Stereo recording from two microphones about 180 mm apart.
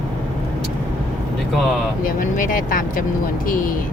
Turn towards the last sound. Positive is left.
turn(degrees=50)  # may be behind; listen again after turning